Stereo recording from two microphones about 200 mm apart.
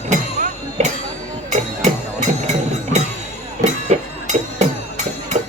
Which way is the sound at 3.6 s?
35° right (ahead or behind).